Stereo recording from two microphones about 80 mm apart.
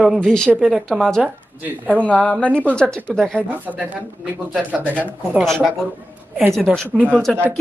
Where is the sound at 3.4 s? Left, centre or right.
Right.